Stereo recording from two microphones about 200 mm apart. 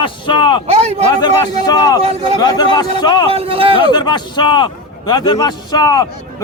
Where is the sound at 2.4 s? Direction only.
20° left (ahead or behind).